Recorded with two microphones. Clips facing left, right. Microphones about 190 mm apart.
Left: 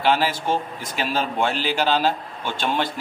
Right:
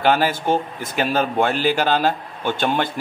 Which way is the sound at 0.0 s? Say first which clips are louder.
Right 3 dB; 50° right (ahead or behind).